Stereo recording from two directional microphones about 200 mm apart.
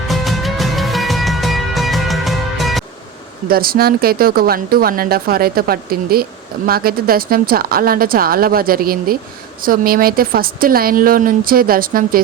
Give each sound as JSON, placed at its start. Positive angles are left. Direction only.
{"t": 0.1, "sound": "music", "side_deg": 0}
{"t": 3.5, "sound": "speech", "side_deg": -50}